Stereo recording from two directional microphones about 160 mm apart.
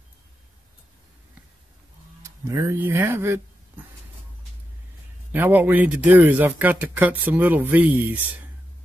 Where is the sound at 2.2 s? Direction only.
20° right (ahead or behind).